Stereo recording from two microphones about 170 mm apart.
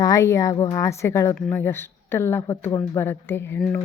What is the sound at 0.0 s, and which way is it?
Speech, 20° left (ahead or behind).